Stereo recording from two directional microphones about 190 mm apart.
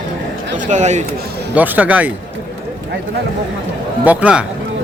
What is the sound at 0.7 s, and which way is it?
Speech, 40° right (ahead or behind).